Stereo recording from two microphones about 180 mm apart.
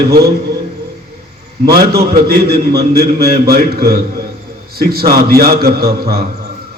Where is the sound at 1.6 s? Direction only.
60° right (ahead or behind).